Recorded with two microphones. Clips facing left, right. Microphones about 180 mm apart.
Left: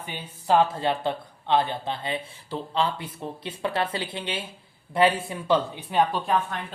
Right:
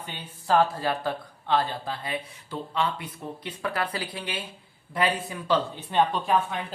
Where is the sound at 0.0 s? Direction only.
20° left (ahead or behind).